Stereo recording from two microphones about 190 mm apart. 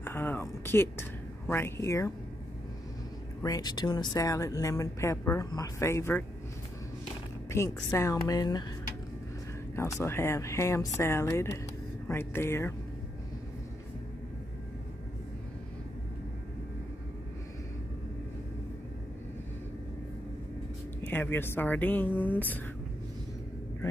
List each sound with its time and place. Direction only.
0.0 s a sound: 10° left (ahead or behind)
1.5 s speech: 15° left (ahead or behind)
3.4 s speech: 20° left (ahead or behind)
7.4 s a woman's voice: 15° left (ahead or behind)
9.8 s speech: 15° left (ahead or behind)
21.1 s speech: 10° left (ahead or behind)